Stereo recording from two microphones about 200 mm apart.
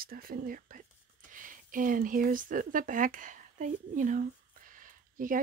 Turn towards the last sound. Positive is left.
turn(degrees=-45)  # may be behind; listen again after turning